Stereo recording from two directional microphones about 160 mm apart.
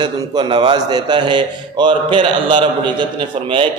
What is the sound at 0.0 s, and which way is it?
A man's voice, 30° right (ahead or behind).